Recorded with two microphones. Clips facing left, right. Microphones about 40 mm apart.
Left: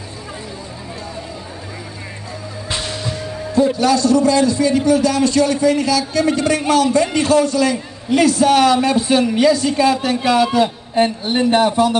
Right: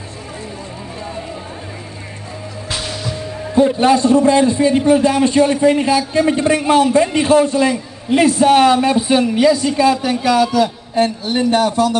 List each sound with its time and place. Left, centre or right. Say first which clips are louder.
2.7 s music: even; centre
3.2 s music: even; centre
3.5 s a man's voice: right 3 dB; right; by 9.2 s centre
9.2 s a woman's voice: right 1 dB; centre
10.1 s a man's voice: right 1 dB; centre